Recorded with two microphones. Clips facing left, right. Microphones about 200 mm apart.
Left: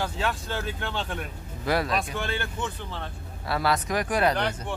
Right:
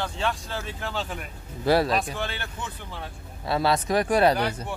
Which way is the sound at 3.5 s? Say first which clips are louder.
Right 3 dB; 25° right (ahead or behind).